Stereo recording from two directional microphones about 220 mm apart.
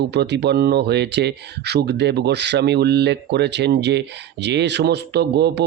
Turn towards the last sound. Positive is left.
turn(degrees=-50)  # may be behind; listen again after turning